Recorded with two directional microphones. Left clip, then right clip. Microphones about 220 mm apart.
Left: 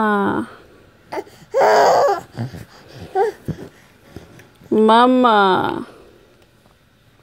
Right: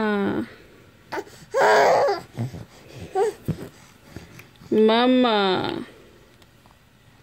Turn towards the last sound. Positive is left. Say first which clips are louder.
# left 7 dB
turn(degrees=10)  # may be behind; listen again after turning